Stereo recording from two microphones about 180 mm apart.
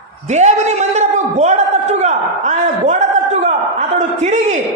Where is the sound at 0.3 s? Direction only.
40° right (ahead or behind).